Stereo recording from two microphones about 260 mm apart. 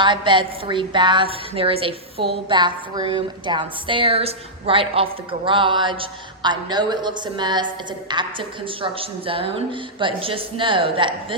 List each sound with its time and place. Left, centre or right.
0.0 s a woman's voice: centre